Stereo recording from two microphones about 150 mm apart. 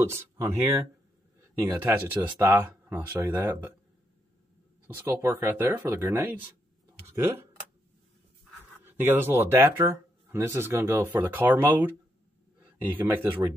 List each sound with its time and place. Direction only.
0.4 s speech: 15° right (ahead or behind)
4.8 s speech: 15° right (ahead or behind)
8.8 s speech: 15° right (ahead or behind)
12.9 s speech: 15° right (ahead or behind)